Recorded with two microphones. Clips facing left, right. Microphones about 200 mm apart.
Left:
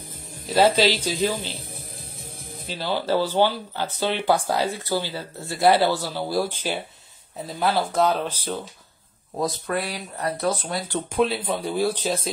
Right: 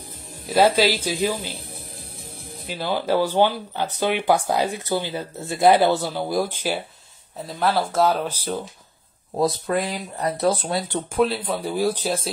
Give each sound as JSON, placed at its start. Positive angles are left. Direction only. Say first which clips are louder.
{"t": 0.5, "sound": "speech", "louder": "right 1 dB", "side_deg": -10}
{"t": 2.7, "sound": "speech", "louder": "right 1 dB", "side_deg": -10}
{"t": 7.4, "sound": "speech", "louder": "right 1 dB", "side_deg": 0}
{"t": 9.4, "sound": "speech", "louder": "right 4 dB", "side_deg": -20}
{"t": 10.4, "sound": "speech", "louder": "right 5 dB", "side_deg": -30}
{"t": 11.1, "sound": "speech", "louder": "right 1 dB", "side_deg": 0}
{"t": 11.5, "sound": "speech", "louder": "right 1 dB", "side_deg": -10}